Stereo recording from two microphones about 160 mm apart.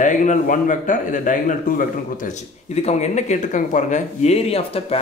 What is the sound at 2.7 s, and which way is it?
Speech, 45° left (ahead or behind).